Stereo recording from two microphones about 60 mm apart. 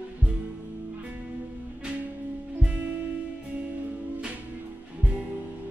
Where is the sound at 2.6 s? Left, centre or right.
Centre.